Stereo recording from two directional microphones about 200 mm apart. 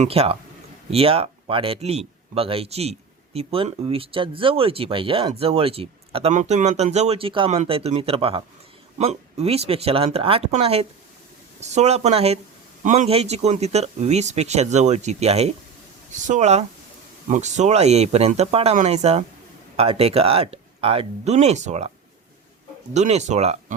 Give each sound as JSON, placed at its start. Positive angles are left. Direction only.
{"t": 0.0, "sound": "speech", "side_deg": -30}
{"t": 23.0, "sound": "speech", "side_deg": -35}